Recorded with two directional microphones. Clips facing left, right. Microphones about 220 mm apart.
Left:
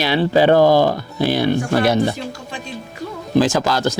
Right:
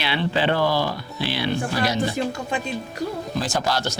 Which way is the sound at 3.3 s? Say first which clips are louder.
Left 10 dB; 90° left.